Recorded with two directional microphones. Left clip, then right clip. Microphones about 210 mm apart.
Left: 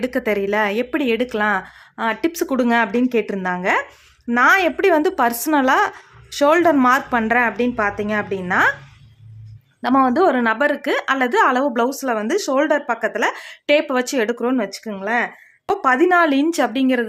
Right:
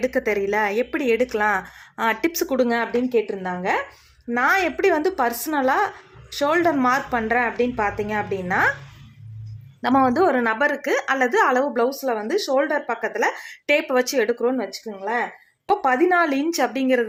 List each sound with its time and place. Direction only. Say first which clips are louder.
0.0 s speech: left 1 dB; 20° left (ahead or behind)
9.8 s speech: left 2 dB; 10° left (ahead or behind); by 17.1 s 25° left (ahead or behind)